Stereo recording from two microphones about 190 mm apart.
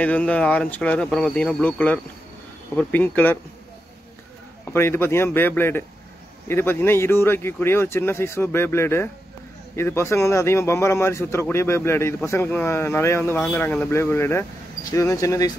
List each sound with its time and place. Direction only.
0.0 s speech: 5° left (ahead or behind)
4.7 s speech: 10° left (ahead or behind)